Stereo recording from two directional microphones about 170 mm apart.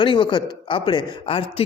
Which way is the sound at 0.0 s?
30° left (ahead or behind).